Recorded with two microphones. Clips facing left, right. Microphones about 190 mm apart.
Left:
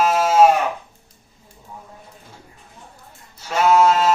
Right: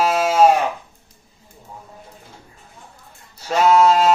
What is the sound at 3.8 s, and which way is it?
Music, 35° right (ahead or behind).